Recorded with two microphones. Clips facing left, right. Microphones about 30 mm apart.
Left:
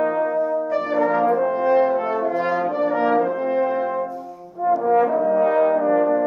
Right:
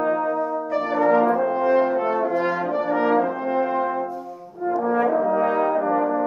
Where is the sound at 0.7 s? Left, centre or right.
Centre.